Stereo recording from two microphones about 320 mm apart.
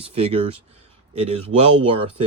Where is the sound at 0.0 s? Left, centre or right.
Centre.